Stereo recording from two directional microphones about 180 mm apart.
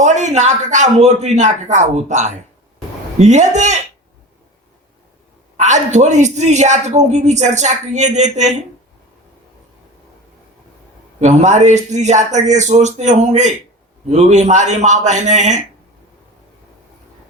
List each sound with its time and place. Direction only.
0.0 s a man's voice: 40° right (ahead or behind)
5.5 s a man's voice: 40° right (ahead or behind)
11.2 s a man's voice: 40° right (ahead or behind)